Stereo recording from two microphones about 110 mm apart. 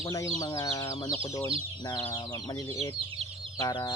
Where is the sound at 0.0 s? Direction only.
30° left (ahead or behind).